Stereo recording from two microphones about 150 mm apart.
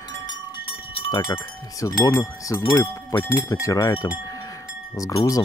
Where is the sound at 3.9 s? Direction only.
25° left (ahead or behind).